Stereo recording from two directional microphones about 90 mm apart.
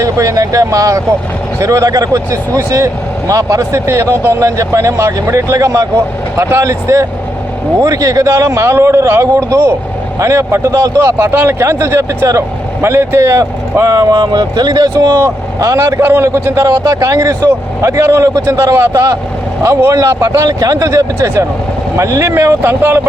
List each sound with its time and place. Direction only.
0.0 s a man's voice: 35° right (ahead or behind)
16.6 s a man's voice: 40° right (ahead or behind); by 23.0 s 25° right (ahead or behind)